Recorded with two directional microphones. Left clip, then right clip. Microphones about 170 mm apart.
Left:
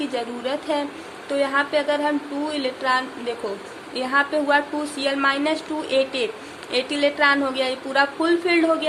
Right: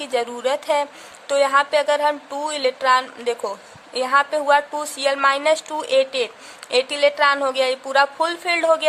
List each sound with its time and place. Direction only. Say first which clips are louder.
0.0 s a woman's voice: right 4 dB; 50° right (ahead or behind)